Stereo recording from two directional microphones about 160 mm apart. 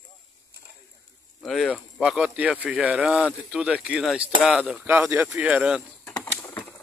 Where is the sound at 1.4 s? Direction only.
Centre (ahead or behind).